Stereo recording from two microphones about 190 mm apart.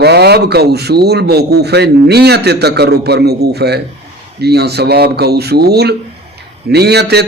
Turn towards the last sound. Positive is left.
turn(degrees=-60)  # may be behind; listen again after turning